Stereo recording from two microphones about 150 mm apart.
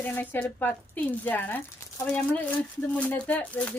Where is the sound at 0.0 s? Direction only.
15° left (ahead or behind).